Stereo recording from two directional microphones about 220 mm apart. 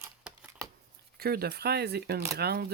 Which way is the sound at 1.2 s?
45° right (ahead or behind).